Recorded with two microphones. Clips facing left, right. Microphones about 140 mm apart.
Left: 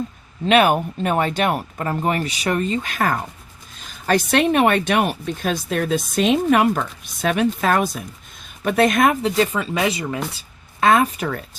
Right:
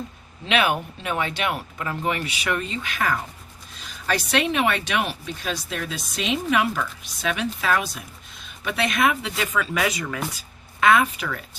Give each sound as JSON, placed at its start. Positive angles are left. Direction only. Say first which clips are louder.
{"t": 0.4, "sound": "speech", "louder": "left 7 dB", "side_deg": 45}
{"t": 10.8, "sound": "speech", "louder": "left 3 dB", "side_deg": 35}